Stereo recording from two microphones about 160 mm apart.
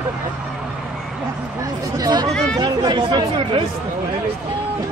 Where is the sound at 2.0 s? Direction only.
25° right (ahead or behind).